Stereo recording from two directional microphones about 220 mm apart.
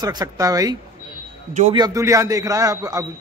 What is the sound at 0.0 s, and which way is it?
Speech, 15° right (ahead or behind).